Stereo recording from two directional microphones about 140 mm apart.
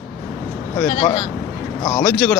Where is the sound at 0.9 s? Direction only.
35° left (ahead or behind).